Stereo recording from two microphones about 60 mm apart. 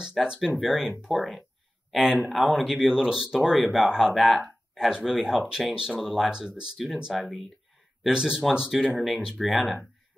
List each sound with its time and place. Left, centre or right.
0.0 s speech: centre
8.7 s speech: centre